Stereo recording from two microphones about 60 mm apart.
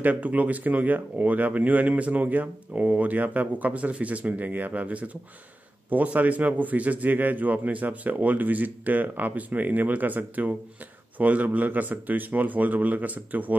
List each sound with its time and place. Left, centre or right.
0.0 s speech: right